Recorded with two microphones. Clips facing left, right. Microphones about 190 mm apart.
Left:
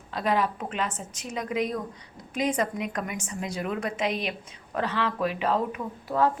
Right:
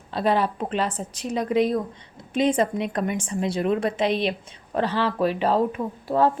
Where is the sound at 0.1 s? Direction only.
30° right (ahead or behind).